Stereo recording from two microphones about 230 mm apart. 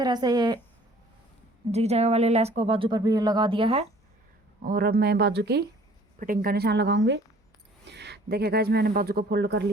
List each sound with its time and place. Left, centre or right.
0.0 s a woman's voice: centre
1.7 s speech: right
4.6 s speech: right